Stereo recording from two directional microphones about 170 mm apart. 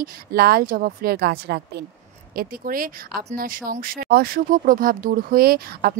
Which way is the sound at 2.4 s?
55° right (ahead or behind).